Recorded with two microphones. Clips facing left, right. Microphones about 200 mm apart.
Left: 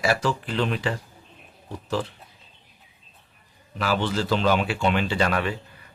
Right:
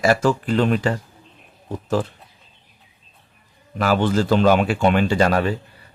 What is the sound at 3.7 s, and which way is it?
A man's voice, 50° right (ahead or behind).